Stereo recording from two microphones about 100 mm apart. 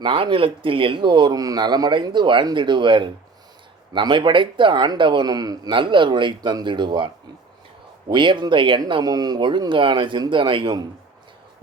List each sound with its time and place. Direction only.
0.0 s speech: 60° right (ahead or behind)
8.1 s speech: 55° right (ahead or behind)